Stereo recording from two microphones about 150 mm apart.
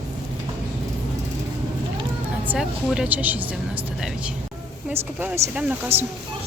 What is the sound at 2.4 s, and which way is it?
Speech, 5° right (ahead or behind).